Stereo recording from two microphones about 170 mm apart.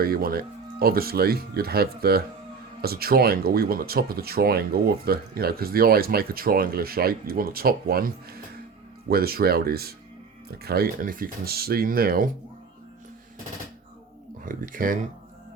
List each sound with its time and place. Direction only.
0.0 s speech: 60° right (ahead or behind)
14.4 s speech: 55° right (ahead or behind)